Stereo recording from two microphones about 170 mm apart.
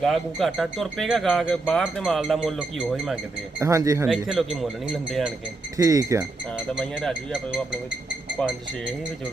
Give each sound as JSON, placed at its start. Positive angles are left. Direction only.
{"t": 0.0, "sound": "speech", "side_deg": 0}
{"t": 3.6, "sound": "speech", "side_deg": -20}
{"t": 4.1, "sound": "speech", "side_deg": 0}
{"t": 5.7, "sound": "speech", "side_deg": -20}